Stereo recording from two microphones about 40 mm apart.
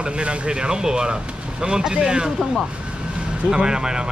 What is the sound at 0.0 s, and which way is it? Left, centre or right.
Speech, right.